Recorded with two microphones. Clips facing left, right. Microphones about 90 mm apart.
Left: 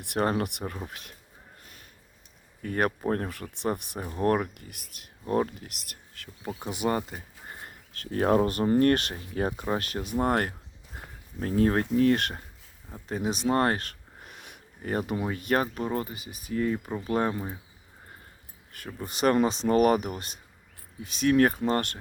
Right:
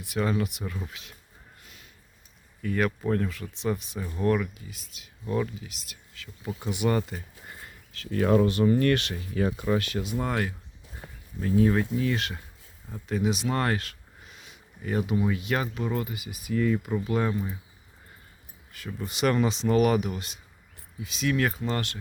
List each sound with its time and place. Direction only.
0.0 s speech: 55° left (ahead or behind)
1.6 s a sound: 45° left (ahead or behind)
2.6 s speech: 40° left (ahead or behind)
4.1 s speech: 45° left (ahead or behind)
6.6 s speech: 35° left (ahead or behind)
7.1 s speech: 10° left (ahead or behind)
7.4 s a sound: 25° left (ahead or behind)
7.7 s speech: 45° left (ahead or behind)
10.9 s a sound: 70° left (ahead or behind)
11.3 s speech: 50° left (ahead or behind)
13.1 s speech: 35° left (ahead or behind); by 14.6 s 55° left (ahead or behind)
14.8 s speech: 45° left (ahead or behind)
19.0 s speech: 40° left (ahead or behind)